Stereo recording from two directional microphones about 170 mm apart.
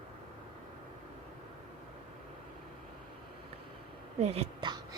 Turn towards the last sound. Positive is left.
turn(degrees=-35)  # may be behind; listen again after turning